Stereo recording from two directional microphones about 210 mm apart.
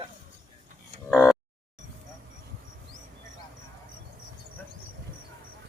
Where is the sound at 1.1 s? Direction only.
5° left (ahead or behind).